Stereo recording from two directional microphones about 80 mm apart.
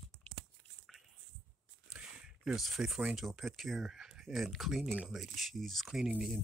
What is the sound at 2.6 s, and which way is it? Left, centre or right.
Speech, centre.